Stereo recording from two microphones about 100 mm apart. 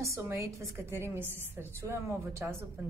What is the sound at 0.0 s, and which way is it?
A woman's voice, 30° right (ahead or behind).